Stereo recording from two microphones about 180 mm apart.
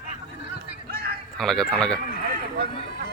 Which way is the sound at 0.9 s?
60° right (ahead or behind).